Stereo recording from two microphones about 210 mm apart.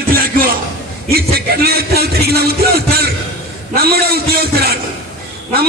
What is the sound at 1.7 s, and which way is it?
A man's voice, 50° right (ahead or behind).